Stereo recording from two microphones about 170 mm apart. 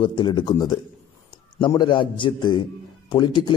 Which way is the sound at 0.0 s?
30° left (ahead or behind).